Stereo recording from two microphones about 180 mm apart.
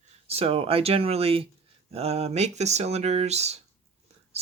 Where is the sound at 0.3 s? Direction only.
35° right (ahead or behind).